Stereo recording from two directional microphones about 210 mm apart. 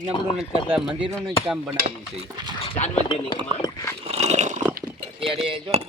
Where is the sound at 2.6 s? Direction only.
30° left (ahead or behind).